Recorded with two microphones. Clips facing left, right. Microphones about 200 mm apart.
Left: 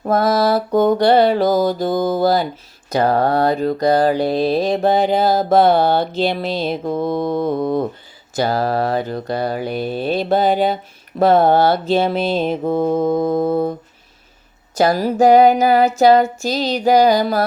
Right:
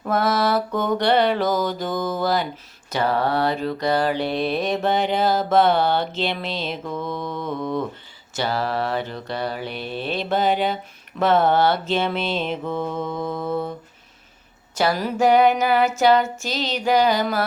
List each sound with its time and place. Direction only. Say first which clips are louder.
0.0 s mantra: left 5 dB; 35° left (ahead or behind)
14.8 s mantra: left 6 dB; 40° left (ahead or behind)